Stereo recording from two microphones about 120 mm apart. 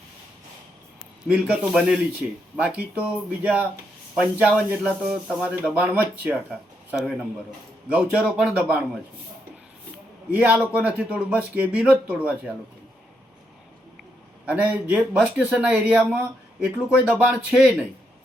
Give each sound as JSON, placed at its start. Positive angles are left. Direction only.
{"t": 1.3, "sound": "speech", "side_deg": -5}
{"t": 7.9, "sound": "speech", "side_deg": -10}
{"t": 10.3, "sound": "speech", "side_deg": -10}
{"t": 14.4, "sound": "speech", "side_deg": -10}